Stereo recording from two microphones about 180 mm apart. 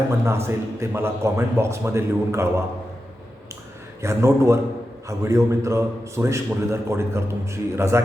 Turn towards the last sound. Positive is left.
turn(degrees=-15)  # may be behind; listen again after turning